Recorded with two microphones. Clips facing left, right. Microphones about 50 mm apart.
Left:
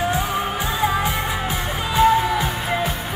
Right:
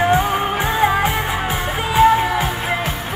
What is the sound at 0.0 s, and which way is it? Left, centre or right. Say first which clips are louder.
Music: right 5 dB; right.